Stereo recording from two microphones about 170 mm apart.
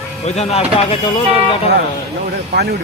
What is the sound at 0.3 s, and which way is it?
Speech, 35° left (ahead or behind).